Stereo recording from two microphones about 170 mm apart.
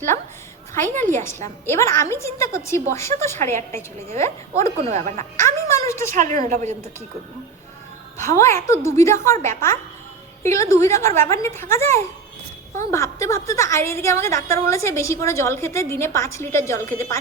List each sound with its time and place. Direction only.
0.9 s a woman's voice: 15° left (ahead or behind)
4.9 s a woman's voice: 45° right (ahead or behind)
5.4 s a sound: 15° left (ahead or behind)
6.1 s a woman's voice: 50° right (ahead or behind)
8.2 s a woman's voice: 15° left (ahead or behind)